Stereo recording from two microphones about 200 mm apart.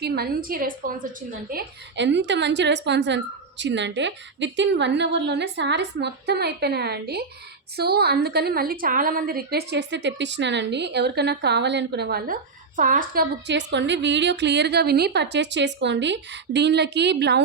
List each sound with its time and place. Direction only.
0.0 s a woman's voice: 50° right (ahead or behind)
13.5 s a woman's voice: 60° right (ahead or behind)